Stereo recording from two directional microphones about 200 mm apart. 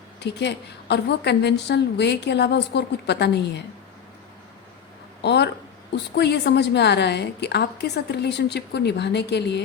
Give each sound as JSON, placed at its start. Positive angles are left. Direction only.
{"t": 0.2, "sound": "a woman's voice", "side_deg": 60}
{"t": 5.2, "sound": "a woman's voice", "side_deg": 60}